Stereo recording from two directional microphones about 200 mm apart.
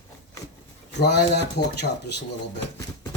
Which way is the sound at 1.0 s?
55° left (ahead or behind).